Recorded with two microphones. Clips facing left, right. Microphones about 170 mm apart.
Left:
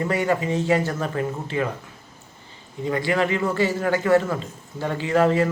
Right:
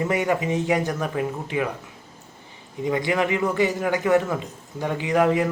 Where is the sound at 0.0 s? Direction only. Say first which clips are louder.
Even; 20° right (ahead or behind).